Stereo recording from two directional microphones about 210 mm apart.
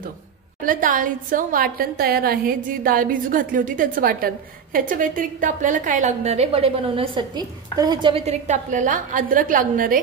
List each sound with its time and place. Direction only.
0.7 s a woman's voice: 40° right (ahead or behind)